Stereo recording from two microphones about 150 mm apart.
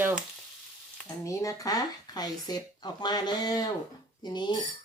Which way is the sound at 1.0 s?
20° left (ahead or behind).